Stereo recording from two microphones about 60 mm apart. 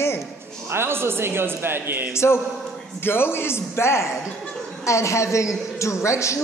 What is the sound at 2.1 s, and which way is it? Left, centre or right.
A woman's voice, left.